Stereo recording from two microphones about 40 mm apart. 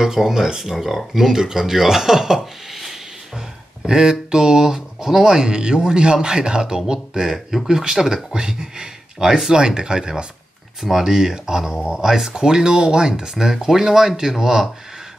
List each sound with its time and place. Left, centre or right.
0.0 s speech: centre
3.8 s speech: centre